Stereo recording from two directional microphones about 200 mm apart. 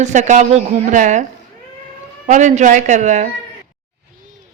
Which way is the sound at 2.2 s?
35° right (ahead or behind).